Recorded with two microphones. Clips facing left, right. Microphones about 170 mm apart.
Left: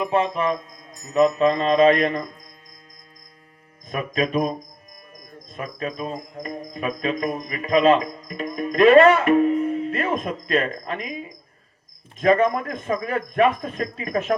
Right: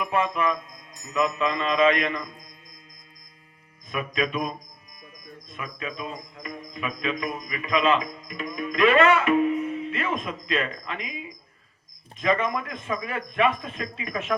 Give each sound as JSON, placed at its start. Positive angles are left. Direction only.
{"t": 0.0, "sound": "speech", "side_deg": 30}
{"t": 3.8, "sound": "speech", "side_deg": 40}
{"t": 5.5, "sound": "music", "side_deg": 40}